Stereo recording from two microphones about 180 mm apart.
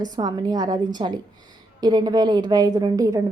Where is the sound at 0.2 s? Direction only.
20° right (ahead or behind).